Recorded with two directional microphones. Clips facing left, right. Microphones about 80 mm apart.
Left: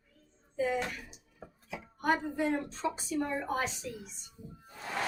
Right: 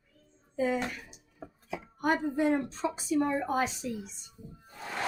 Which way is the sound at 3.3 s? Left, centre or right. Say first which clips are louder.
Right 4 dB; centre.